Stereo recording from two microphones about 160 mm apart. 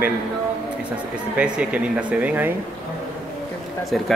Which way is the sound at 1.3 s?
5° right (ahead or behind).